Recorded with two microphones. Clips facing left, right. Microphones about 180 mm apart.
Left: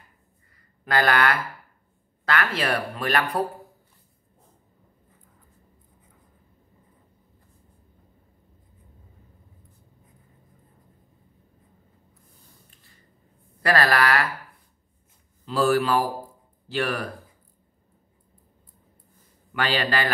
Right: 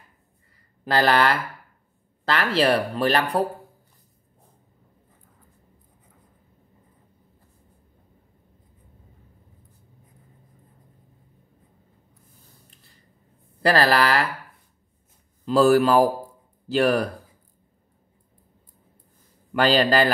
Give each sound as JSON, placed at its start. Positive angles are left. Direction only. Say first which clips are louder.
{"t": 0.8, "sound": "speech", "louder": "right 2 dB", "side_deg": -30}
{"t": 13.6, "sound": "speech", "louder": "right 2 dB", "side_deg": -30}
{"t": 15.4, "sound": "speech", "louder": "right 5 dB", "side_deg": -40}
{"t": 19.6, "sound": "speech", "louder": "right 7 dB", "side_deg": -35}